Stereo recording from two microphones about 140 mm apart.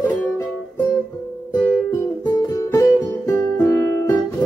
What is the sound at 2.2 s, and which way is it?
Guitar, 25° left (ahead or behind).